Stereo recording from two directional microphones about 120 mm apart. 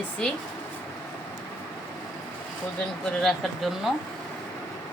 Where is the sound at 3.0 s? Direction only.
5° left (ahead or behind).